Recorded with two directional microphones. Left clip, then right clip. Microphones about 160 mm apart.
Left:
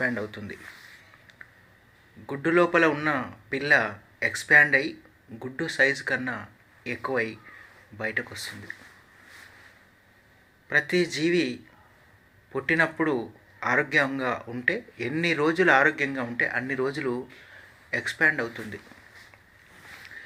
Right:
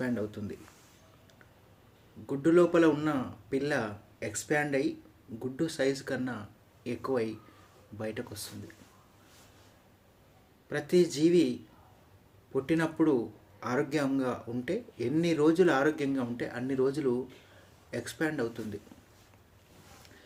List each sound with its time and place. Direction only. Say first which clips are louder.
0.0 s speech: left 6 dB; 40° right (ahead or behind)
2.2 s speech: left 2 dB; 35° right (ahead or behind)
10.7 s speech: left 4 dB; 35° right (ahead or behind)